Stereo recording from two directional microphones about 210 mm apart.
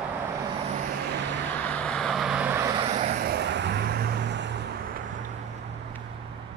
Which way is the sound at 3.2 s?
50° right (ahead or behind).